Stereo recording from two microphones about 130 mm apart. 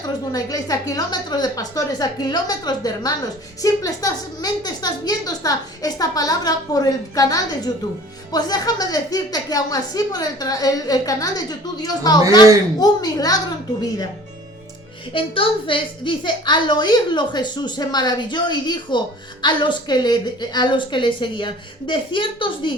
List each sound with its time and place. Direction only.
0.3 s a woman's voice: 30° left (ahead or behind)
15.1 s a woman's voice: 40° left (ahead or behind)